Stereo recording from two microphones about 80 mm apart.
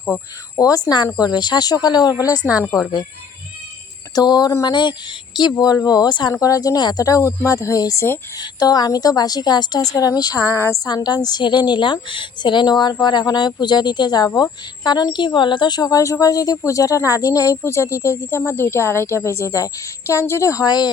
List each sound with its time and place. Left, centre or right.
0.1 s speech: left
1.2 s a woman's voice: left
4.1 s a woman's voice: left
4.6 s speech: left
5.4 s a woman's voice: left
6.4 s speech: left
10.8 s a woman's voice: left
20.7 s a woman's voice: left